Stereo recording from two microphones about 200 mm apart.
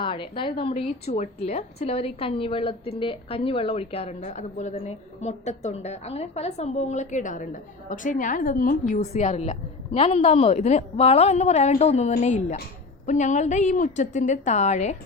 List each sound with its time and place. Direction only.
0.0 s a woman's voice: 25° left (ahead or behind)